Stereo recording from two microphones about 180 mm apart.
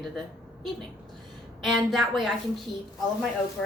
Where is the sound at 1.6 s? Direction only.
Centre (ahead or behind).